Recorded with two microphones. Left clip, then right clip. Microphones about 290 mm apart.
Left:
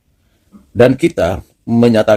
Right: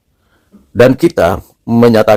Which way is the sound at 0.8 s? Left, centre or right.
Centre.